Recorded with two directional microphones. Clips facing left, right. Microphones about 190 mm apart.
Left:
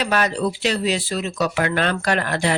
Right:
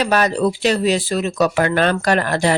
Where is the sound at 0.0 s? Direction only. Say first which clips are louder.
Right 4 dB; 40° right (ahead or behind).